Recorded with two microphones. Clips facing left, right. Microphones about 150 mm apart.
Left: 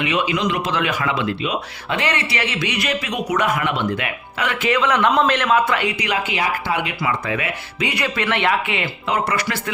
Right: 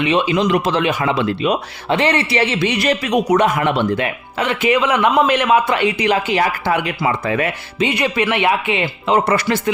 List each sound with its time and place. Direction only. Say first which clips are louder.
0.0 s speech: right 4 dB; 30° right (ahead or behind)
1.1 s speech: right 5 dB; 45° right (ahead or behind)
1.9 s speech: right 6 dB; 30° right (ahead or behind)
6.3 s speech: right 5 dB; 40° right (ahead or behind)
7.9 s speech: right 4 dB; 20° right (ahead or behind)